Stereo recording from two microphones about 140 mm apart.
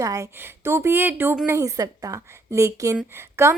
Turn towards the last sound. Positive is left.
turn(degrees=-15)  # may be behind; listen again after turning